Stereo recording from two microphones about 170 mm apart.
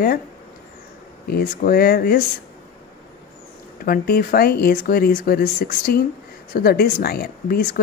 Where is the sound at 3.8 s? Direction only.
60° left (ahead or behind).